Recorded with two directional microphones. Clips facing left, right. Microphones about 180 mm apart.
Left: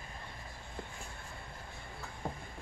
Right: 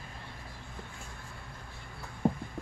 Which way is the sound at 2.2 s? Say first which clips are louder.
Right 12 dB; 25° right (ahead or behind).